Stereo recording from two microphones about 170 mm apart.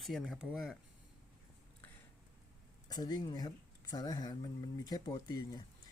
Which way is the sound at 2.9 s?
25° left (ahead or behind).